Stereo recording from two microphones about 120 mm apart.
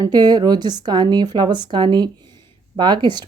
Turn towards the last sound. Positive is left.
turn(degrees=-40)  # may be behind; listen again after turning